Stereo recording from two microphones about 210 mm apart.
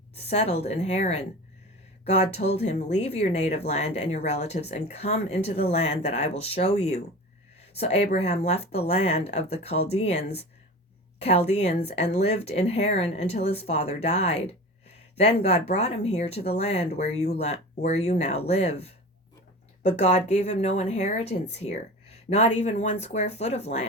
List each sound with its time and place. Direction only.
0.2 s speech: 30° left (ahead or behind)